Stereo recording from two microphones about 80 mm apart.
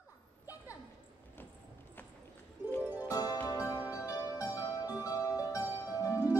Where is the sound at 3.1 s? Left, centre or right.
Left.